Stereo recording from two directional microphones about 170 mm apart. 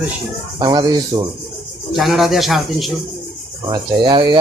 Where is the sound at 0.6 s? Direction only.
25° right (ahead or behind).